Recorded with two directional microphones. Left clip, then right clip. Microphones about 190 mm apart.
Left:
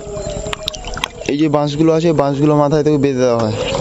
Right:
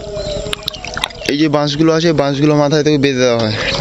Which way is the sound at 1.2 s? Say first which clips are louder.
Right 1 dB; 5° left (ahead or behind).